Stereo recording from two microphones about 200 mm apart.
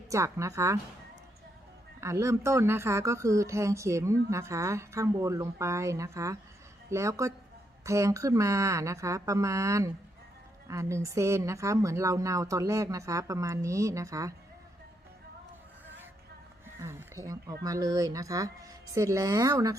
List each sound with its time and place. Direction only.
0.1 s speech: 15° right (ahead or behind)
2.0 s speech: 15° right (ahead or behind)
16.8 s speech: 15° right (ahead or behind)